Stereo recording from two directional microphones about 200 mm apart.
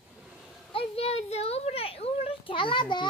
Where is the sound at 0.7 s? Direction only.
30° left (ahead or behind).